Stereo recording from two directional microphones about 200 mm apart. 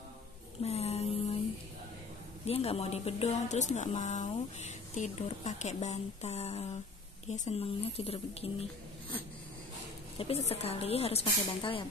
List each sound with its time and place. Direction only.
0.6 s music: 30° left (ahead or behind)
2.4 s a woman's voice: 30° left (ahead or behind)
10.1 s speech: 30° left (ahead or behind)